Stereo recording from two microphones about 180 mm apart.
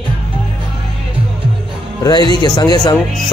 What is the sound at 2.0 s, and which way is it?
Speech, 25° left (ahead or behind).